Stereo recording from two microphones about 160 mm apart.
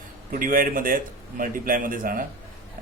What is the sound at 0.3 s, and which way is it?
A man's voice, 60° right (ahead or behind).